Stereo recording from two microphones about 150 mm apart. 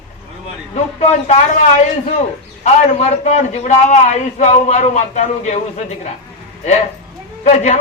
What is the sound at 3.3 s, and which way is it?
A man's voice, 50° left (ahead or behind).